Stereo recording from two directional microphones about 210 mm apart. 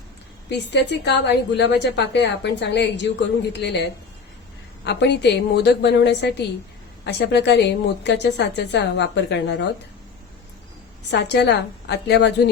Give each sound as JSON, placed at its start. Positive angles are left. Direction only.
{"t": 0.5, "sound": "a woman's voice", "side_deg": 55}
{"t": 11.1, "sound": "a woman's voice", "side_deg": 55}